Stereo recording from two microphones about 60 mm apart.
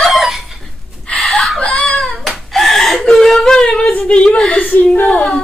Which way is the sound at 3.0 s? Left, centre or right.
Centre.